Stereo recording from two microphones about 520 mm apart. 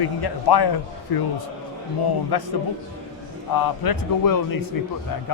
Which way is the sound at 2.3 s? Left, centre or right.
Left.